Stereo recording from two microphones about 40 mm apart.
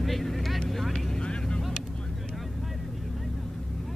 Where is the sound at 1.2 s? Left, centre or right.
Left.